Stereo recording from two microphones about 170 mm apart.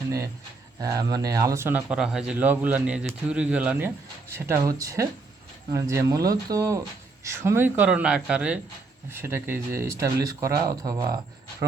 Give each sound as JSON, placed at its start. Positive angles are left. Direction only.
{"t": 0.8, "sound": "speech", "side_deg": -20}